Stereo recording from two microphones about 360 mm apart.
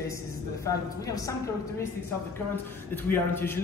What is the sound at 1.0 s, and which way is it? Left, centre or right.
Speech, centre.